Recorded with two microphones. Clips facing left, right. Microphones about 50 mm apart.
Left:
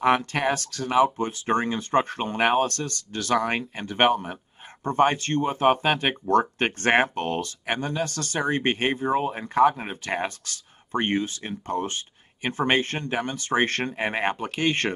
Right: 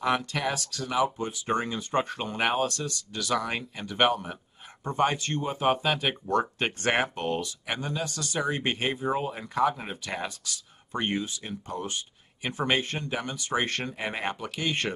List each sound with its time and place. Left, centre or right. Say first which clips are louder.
0.0 s speech: left 5 dB; left